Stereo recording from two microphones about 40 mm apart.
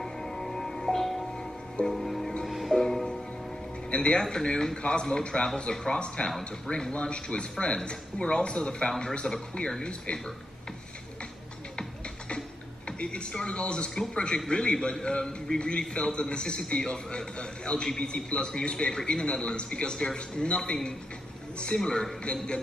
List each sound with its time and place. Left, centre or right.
0.0 s music: centre
2.7 s music: centre
3.9 s speech: left
12.8 s speech: left